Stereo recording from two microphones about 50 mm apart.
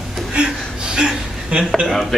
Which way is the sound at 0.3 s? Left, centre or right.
Centre.